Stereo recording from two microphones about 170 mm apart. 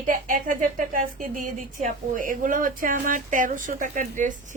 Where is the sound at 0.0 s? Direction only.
55° right (ahead or behind).